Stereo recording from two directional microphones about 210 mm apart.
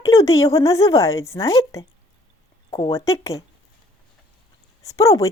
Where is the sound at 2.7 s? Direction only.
25° left (ahead or behind).